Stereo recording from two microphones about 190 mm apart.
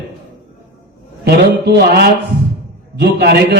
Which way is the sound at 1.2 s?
60° right (ahead or behind).